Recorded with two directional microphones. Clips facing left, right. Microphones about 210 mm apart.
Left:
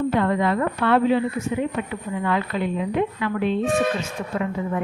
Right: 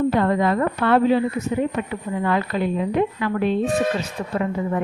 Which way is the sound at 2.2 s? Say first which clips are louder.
Right 2 dB; 40° right (ahead or behind).